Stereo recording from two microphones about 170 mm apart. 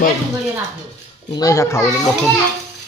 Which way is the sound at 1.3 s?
20° left (ahead or behind).